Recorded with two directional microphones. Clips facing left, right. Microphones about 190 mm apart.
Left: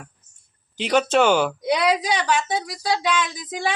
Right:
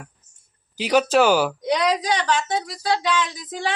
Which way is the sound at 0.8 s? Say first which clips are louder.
Right 1 dB; 5° right (ahead or behind).